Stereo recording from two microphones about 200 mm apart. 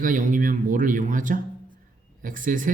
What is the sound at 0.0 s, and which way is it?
A man's voice, 40° right (ahead or behind).